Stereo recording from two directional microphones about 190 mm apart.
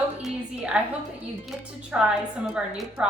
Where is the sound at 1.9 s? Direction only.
5° right (ahead or behind).